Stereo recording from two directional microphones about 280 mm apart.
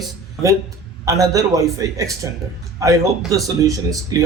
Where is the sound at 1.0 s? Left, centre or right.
Centre.